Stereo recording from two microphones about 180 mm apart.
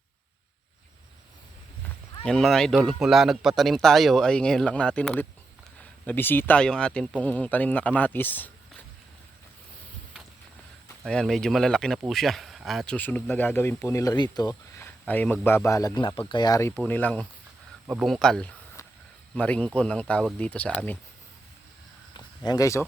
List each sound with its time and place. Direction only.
2.2 s speech: centre (ahead or behind)
11.0 s speech: 5° left (ahead or behind); by 14.8 s 20° left (ahead or behind)
14.8 s speech: 10° left (ahead or behind)
17.8 s speech: 5° right (ahead or behind)
22.4 s speech: 20° left (ahead or behind)